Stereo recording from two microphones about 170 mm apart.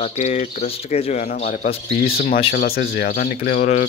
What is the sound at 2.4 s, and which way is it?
Speech, 60° left (ahead or behind).